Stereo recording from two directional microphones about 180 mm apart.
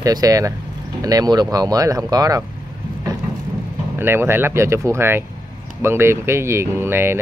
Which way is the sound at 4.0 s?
10° right (ahead or behind).